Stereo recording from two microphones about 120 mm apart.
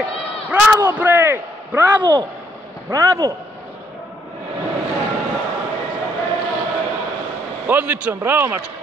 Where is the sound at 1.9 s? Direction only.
40° right (ahead or behind).